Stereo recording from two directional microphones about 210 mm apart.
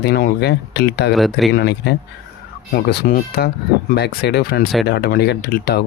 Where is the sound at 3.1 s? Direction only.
45° left (ahead or behind).